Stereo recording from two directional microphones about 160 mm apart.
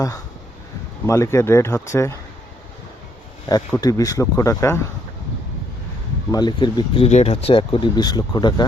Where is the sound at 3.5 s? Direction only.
25° left (ahead or behind).